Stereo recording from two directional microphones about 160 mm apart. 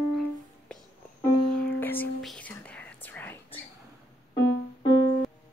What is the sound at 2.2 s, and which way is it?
Whispering, 10° left (ahead or behind).